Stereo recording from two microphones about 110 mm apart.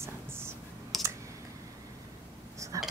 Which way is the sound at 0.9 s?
Centre (ahead or behind).